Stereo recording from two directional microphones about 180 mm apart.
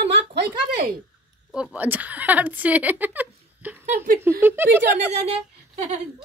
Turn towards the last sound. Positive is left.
turn(degrees=-35)  # may be behind; listen again after turning